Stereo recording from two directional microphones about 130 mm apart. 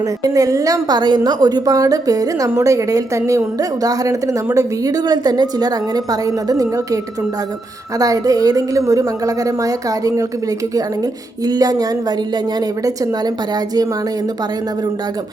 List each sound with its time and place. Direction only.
0.2 s a woman's voice: 25° right (ahead or behind)
11.4 s a woman's voice: 30° right (ahead or behind)